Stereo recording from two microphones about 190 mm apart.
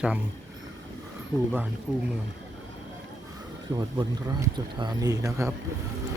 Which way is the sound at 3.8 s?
25° right (ahead or behind).